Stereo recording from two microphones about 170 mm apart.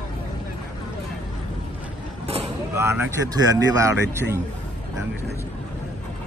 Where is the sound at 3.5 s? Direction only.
20° right (ahead or behind).